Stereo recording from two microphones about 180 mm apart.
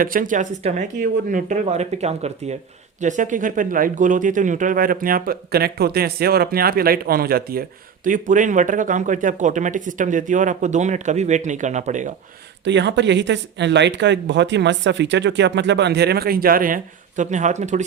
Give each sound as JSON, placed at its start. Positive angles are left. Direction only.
{"t": 0.0, "sound": "speech", "side_deg": -50}
{"t": 8.0, "sound": "speech", "side_deg": -45}
{"t": 12.6, "sound": "speech", "side_deg": -75}